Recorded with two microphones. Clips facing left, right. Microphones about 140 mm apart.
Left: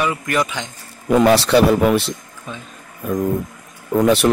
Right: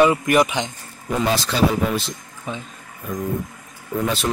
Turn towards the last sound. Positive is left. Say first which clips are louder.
# left 8 dB
turn(degrees=70)  # may be behind; listen again after turning